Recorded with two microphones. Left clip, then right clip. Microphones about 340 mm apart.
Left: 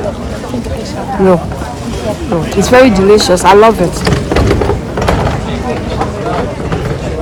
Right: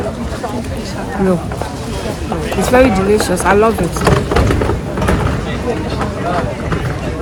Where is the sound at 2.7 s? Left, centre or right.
Left.